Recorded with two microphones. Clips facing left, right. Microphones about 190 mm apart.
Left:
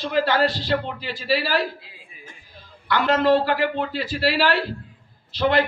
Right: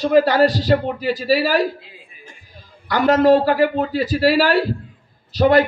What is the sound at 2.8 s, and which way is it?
A man's voice, 40° right (ahead or behind).